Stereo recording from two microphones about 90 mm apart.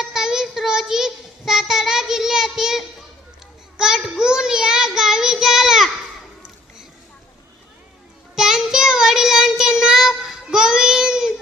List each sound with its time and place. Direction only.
0.0 s child singing: 5° right (ahead or behind)
8.4 s child singing: 5° right (ahead or behind)